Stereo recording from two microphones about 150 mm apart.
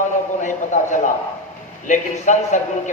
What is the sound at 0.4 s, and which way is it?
A man's voice, 55° left (ahead or behind).